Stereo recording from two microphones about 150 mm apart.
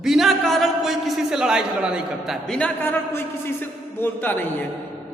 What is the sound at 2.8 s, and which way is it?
Speech, 15° left (ahead or behind).